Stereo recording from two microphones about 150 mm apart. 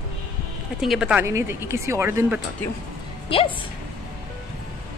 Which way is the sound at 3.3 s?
35° left (ahead or behind).